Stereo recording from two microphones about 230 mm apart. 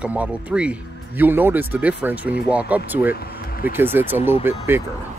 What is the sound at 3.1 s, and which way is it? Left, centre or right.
Vehicle, left.